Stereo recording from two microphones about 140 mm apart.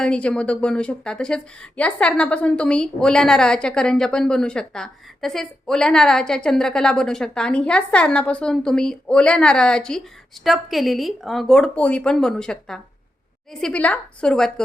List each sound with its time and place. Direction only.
0.0 s a woman's voice: 5° left (ahead or behind)